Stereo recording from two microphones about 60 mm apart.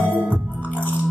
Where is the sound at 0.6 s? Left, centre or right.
Left.